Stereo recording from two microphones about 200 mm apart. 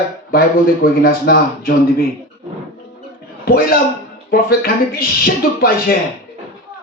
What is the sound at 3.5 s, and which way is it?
Speech, 50° left (ahead or behind).